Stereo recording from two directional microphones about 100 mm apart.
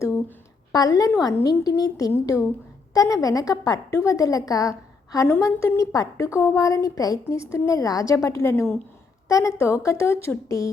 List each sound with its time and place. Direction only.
0.7 s a woman's voice: 40° left (ahead or behind)